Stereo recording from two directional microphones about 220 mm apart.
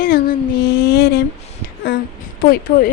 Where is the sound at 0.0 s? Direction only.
40° left (ahead or behind).